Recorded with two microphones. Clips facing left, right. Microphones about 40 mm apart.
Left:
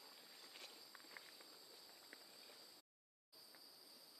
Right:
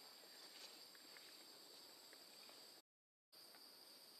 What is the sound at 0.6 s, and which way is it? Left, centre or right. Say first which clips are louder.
Walk: left 3 dB; left.